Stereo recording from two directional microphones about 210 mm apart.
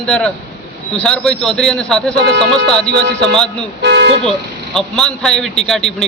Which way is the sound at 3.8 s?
55° right (ahead or behind).